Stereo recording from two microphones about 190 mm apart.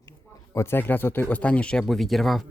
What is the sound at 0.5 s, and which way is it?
Speech, 15° left (ahead or behind).